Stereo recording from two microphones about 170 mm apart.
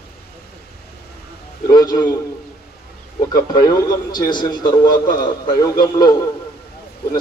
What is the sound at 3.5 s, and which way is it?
A man's voice, 20° left (ahead or behind).